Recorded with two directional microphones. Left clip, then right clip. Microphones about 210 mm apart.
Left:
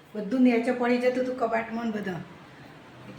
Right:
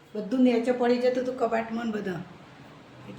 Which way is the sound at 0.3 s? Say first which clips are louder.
Even; centre (ahead or behind).